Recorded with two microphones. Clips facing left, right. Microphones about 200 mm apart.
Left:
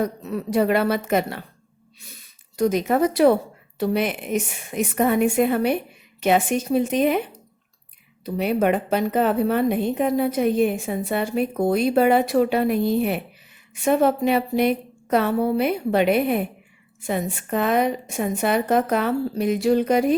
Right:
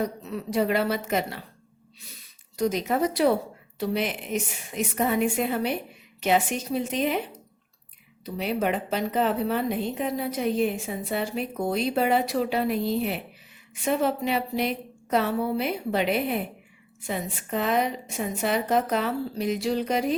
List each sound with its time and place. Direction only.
0.0 s a woman's voice: 55° left (ahead or behind)
2.6 s a woman's voice: 55° left (ahead or behind)
8.2 s a woman's voice: 55° left (ahead or behind)